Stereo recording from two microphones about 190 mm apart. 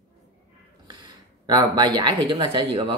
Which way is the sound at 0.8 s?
20° right (ahead or behind).